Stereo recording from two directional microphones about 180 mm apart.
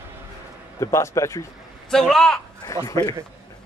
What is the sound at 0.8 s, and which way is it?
Speech, 15° left (ahead or behind).